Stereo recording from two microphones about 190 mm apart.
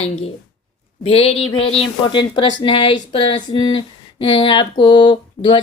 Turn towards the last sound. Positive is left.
turn(degrees=25)  # may be behind; listen again after turning